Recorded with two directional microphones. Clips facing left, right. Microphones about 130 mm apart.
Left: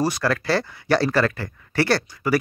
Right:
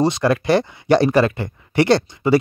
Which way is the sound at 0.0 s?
20° right (ahead or behind).